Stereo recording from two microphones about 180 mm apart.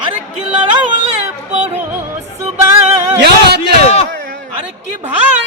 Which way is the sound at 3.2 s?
65° right (ahead or behind).